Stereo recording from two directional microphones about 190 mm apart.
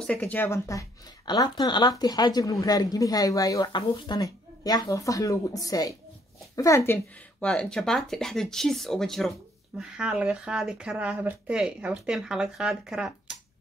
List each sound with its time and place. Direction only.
0.0 s speech: 5° left (ahead or behind)